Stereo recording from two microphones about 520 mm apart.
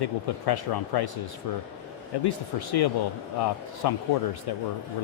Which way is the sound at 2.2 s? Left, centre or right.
Left.